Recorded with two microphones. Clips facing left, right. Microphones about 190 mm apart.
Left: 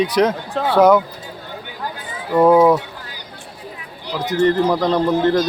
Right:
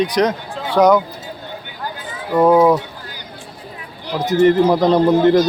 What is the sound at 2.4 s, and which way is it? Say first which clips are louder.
Speech: even; 5° left (ahead or behind).